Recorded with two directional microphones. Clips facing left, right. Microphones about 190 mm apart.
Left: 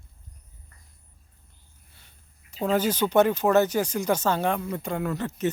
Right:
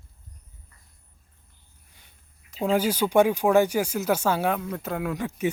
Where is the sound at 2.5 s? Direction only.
5° right (ahead or behind).